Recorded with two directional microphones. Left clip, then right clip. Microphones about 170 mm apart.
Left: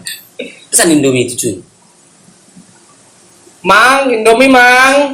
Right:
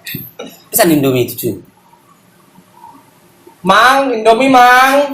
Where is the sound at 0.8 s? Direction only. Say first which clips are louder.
Left 1 dB; 45° right (ahead or behind).